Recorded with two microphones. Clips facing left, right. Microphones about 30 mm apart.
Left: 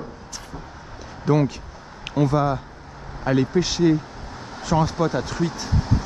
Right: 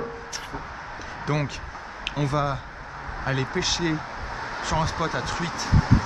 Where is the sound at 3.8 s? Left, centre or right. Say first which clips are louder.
Left 7 dB; centre.